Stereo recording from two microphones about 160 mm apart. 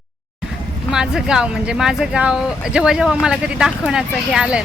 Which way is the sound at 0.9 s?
5° right (ahead or behind).